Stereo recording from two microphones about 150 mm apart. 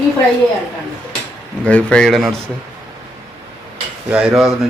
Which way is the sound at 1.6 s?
10° left (ahead or behind).